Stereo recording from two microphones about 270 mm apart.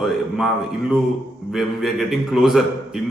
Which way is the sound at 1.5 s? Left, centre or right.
Centre.